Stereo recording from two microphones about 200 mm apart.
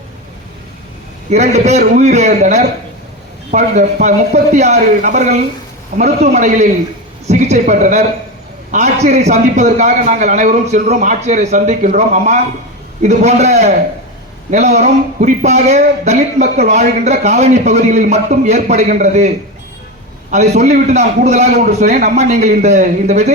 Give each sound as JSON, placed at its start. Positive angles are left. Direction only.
{"t": 1.3, "sound": "a man's voice", "side_deg": -35}
{"t": 20.3, "sound": "a man's voice", "side_deg": -35}